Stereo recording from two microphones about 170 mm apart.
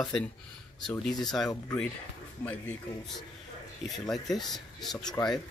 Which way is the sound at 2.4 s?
10° left (ahead or behind).